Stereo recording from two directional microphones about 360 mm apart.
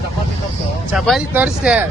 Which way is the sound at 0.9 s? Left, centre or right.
Centre.